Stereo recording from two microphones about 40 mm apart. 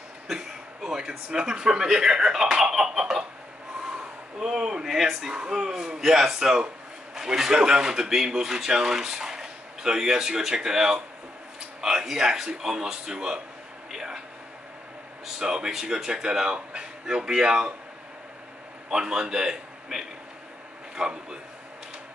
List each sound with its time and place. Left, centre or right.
0.8 s speech: centre
4.4 s speech: centre
4.9 s speech: centre
5.3 s speech: centre
15.3 s speech: centre
18.9 s a man's voice: centre